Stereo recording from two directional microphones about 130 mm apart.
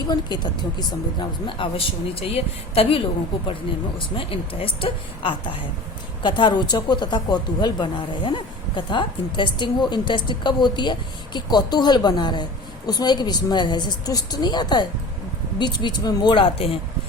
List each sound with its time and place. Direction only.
0.1 s a woman's voice: 35° left (ahead or behind)